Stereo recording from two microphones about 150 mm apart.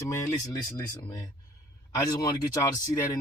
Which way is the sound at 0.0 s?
20° left (ahead or behind).